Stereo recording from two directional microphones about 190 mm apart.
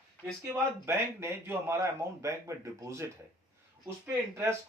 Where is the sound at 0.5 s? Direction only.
15° right (ahead or behind).